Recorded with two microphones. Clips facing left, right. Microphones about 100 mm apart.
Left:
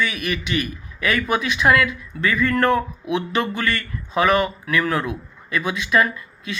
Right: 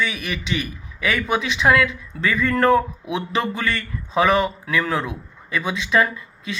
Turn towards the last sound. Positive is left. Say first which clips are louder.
# left 1 dB
turn(degrees=-25)  # may be behind; listen again after turning